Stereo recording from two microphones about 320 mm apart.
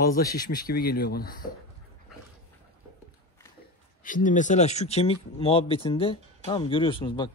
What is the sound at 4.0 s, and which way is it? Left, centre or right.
Speech, left.